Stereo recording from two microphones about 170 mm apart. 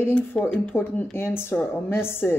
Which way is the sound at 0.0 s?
10° left (ahead or behind).